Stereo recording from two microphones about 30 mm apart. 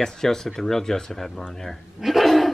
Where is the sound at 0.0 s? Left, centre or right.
Centre.